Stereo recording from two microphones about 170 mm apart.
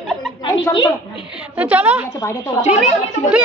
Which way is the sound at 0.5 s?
25° left (ahead or behind).